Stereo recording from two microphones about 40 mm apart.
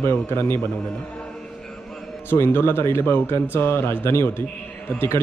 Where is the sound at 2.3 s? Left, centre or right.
Left.